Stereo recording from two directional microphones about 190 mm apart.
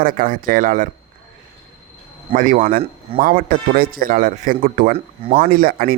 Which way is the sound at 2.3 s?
45° right (ahead or behind).